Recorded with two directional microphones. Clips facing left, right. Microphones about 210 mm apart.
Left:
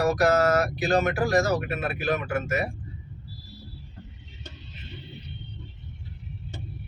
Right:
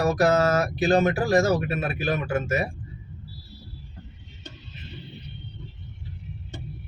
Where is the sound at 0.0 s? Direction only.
30° right (ahead or behind).